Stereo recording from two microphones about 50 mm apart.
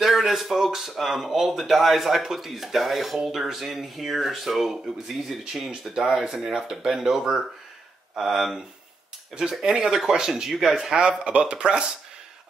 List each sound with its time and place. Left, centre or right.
0.0 s speech: centre
11.0 s speech: right